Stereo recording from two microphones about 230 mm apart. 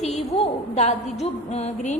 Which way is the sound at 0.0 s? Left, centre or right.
Left.